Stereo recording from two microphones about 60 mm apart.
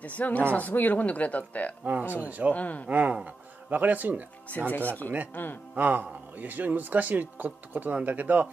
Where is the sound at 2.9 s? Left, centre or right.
Right.